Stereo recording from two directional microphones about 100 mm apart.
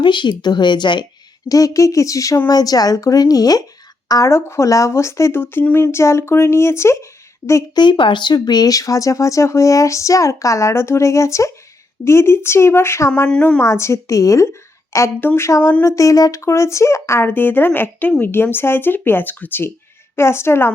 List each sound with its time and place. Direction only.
0.0 s speech: 50° left (ahead or behind)
1.5 s speech: 35° left (ahead or behind)
7.8 s speech: 55° left (ahead or behind); by 13.2 s 25° left (ahead or behind)
13.2 s a woman's voice: 10° left (ahead or behind)
13.6 s speech: 30° left (ahead or behind)